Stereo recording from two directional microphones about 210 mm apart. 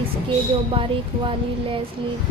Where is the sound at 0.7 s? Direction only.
25° right (ahead or behind).